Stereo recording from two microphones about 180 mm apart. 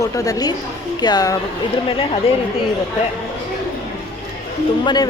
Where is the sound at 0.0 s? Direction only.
20° left (ahead or behind).